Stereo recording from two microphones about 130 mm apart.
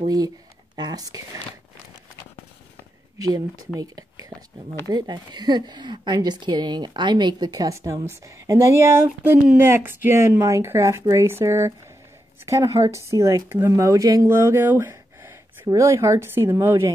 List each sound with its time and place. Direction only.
0.7 s speech: 30° right (ahead or behind)
3.2 s speech: 30° right (ahead or behind)